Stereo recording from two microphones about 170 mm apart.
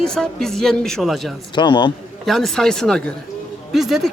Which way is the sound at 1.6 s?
25° left (ahead or behind).